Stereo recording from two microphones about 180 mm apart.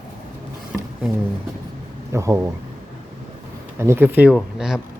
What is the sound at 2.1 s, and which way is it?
Speech, 15° right (ahead or behind).